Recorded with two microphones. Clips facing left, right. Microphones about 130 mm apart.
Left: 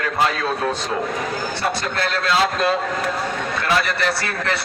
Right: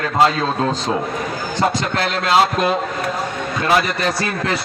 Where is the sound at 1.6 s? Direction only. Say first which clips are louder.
Right 6 dB; 90° right.